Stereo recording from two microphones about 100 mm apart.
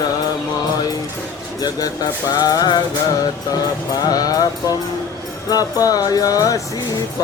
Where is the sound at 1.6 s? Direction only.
40° left (ahead or behind).